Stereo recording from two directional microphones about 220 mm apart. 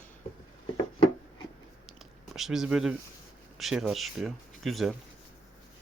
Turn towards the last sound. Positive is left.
turn(degrees=0)  # may be behind; listen again after turning